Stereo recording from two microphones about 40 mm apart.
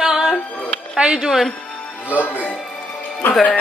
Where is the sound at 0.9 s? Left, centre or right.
Right.